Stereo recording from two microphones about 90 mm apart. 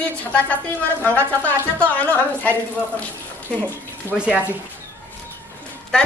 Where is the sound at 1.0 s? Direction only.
20° left (ahead or behind).